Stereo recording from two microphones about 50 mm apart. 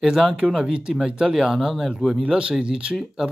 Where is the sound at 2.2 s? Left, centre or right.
Centre.